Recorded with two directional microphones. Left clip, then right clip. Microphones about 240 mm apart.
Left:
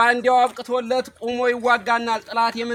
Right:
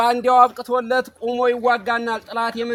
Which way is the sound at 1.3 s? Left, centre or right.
Right.